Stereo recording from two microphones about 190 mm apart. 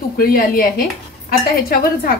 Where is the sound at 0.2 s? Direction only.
50° left (ahead or behind).